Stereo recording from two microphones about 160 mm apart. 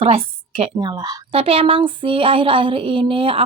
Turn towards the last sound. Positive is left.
turn(degrees=-35)  # may be behind; listen again after turning